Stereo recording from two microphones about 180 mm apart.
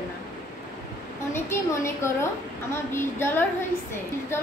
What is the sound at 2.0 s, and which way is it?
A woman's voice, 15° left (ahead or behind).